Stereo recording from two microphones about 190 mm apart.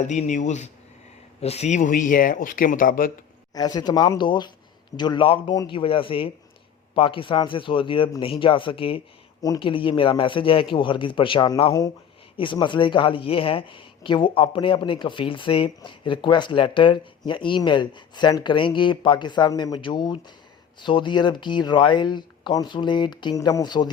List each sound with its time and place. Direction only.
0.1 s speech: 40° left (ahead or behind)
3.5 s speech: 20° left (ahead or behind)